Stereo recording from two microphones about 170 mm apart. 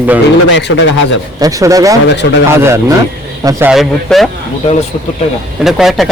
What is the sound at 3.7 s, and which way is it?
Speech, centre (ahead or behind).